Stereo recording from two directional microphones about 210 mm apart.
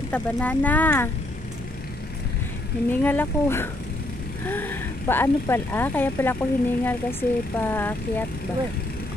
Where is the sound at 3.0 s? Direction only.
10° left (ahead or behind).